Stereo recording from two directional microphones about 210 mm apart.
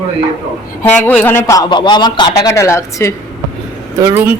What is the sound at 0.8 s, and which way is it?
Speech, 5° left (ahead or behind).